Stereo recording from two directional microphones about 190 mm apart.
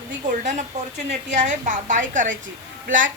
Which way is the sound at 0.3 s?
40° right (ahead or behind).